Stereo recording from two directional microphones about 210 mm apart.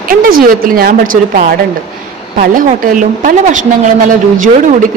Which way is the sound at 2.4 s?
40° right (ahead or behind).